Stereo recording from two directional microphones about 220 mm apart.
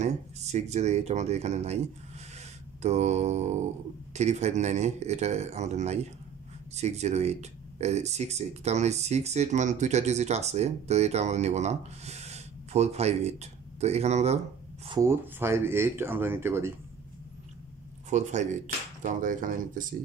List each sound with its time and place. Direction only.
0.0 s speech: 30° right (ahead or behind)
2.8 s speech: 30° right (ahead or behind)
14.9 s speech: 15° right (ahead or behind)
18.1 s speech: 30° right (ahead or behind)